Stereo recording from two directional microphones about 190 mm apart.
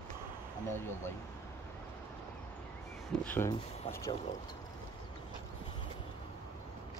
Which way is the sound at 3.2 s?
10° left (ahead or behind).